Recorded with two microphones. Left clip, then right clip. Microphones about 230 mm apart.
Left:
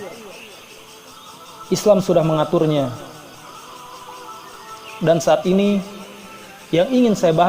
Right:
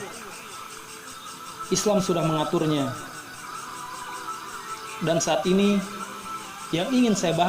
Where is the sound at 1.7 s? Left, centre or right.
Left.